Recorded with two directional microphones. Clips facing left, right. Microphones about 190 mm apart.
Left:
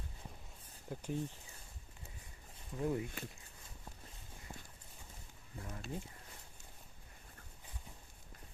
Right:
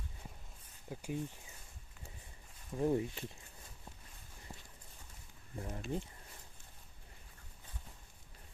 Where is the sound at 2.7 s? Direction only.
25° right (ahead or behind).